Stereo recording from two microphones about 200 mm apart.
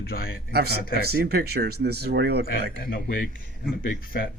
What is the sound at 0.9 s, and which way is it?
Speech, 50° right (ahead or behind).